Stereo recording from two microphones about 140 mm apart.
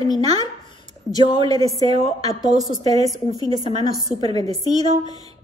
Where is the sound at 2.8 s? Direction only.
50° right (ahead or behind).